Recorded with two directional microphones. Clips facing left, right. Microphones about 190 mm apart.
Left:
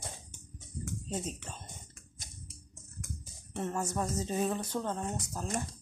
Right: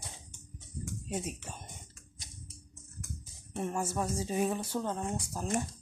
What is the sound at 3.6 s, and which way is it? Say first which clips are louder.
Speech: even; 10° right (ahead or behind).